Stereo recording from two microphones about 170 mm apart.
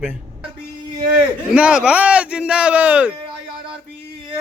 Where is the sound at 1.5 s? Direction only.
5° right (ahead or behind).